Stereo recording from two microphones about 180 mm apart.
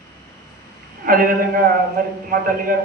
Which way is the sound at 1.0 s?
50° right (ahead or behind).